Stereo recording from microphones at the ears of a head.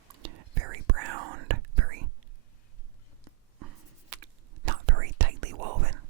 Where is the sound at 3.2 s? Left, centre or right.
Right.